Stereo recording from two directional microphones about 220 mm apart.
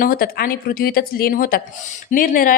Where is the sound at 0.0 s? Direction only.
40° left (ahead or behind).